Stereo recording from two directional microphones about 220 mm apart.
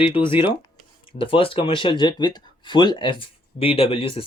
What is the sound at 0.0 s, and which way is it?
Speech, 25° left (ahead or behind).